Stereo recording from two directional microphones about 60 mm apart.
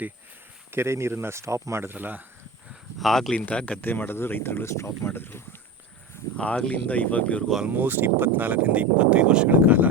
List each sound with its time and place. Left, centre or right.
0.7 s speech: right
1.9 s speech: right
3.0 s speech: centre
3.5 s speech: centre
3.8 s speech: left
6.3 s speech: centre
7.7 s speech: right
9.5 s speech: right